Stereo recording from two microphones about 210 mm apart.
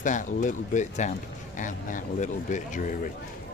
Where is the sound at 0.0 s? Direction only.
35° left (ahead or behind).